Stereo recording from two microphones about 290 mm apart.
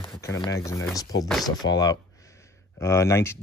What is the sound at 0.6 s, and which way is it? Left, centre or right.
Speech, centre.